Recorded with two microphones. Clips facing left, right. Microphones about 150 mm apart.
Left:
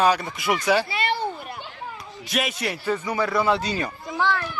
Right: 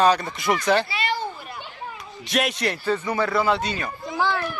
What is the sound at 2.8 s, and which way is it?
Speech, 10° left (ahead or behind).